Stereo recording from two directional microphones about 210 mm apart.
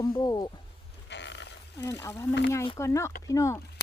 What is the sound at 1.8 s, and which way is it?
Speech, 15° left (ahead or behind).